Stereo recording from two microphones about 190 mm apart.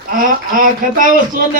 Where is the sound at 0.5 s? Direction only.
45° right (ahead or behind).